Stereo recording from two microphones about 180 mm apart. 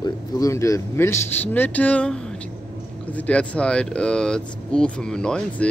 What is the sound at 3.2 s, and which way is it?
Speech, 5° left (ahead or behind).